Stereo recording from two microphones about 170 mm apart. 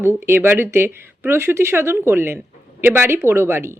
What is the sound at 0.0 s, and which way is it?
A woman's voice, 15° right (ahead or behind).